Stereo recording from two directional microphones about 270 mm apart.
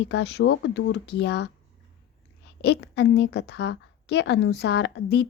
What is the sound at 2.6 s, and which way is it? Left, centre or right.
A woman's voice, left.